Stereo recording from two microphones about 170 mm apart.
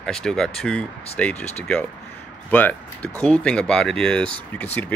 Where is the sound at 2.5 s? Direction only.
10° left (ahead or behind).